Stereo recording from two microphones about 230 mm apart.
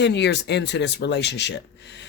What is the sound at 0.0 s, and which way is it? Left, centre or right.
Speech, left.